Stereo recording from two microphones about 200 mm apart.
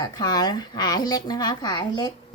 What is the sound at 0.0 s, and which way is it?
A woman's voice, 20° left (ahead or behind).